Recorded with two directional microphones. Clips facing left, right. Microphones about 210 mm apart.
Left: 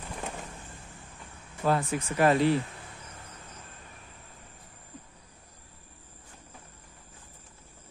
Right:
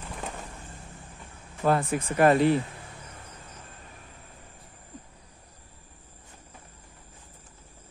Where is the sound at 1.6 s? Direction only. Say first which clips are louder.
Right 3 dB; 55° right (ahead or behind).